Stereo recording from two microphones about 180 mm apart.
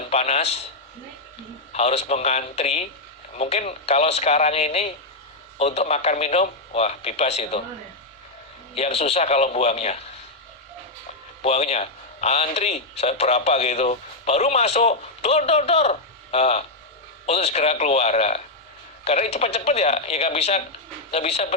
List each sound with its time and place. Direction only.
0.1 s speech: 35° left (ahead or behind)
1.7 s speech: 35° left (ahead or behind)
8.7 s speech: 35° left (ahead or behind)
11.4 s speech: 35° left (ahead or behind)